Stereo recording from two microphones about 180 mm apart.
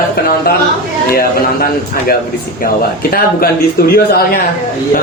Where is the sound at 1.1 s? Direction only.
55° left (ahead or behind).